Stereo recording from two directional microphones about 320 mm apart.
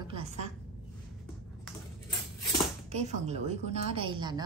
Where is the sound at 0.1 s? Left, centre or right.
Centre.